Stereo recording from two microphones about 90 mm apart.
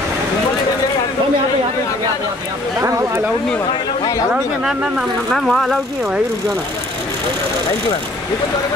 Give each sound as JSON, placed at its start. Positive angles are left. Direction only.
{"t": 2.8, "sound": "speech", "side_deg": -35}
{"t": 4.3, "sound": "speech", "side_deg": -10}